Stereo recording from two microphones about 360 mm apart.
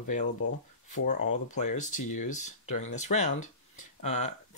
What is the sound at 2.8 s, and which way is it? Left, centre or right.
Speech, centre.